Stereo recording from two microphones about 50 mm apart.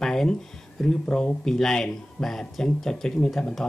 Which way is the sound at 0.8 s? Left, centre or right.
Centre.